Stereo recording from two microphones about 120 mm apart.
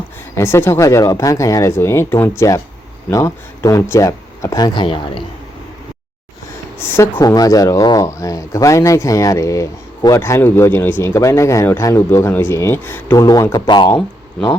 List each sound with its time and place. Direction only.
0.3 s speech: 20° left (ahead or behind); by 5.2 s 40° left (ahead or behind)
6.7 s speech: 20° left (ahead or behind)
13.2 s speech: 30° left (ahead or behind)